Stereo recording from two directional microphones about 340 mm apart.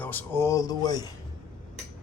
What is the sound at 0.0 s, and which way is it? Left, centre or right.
Speech, centre.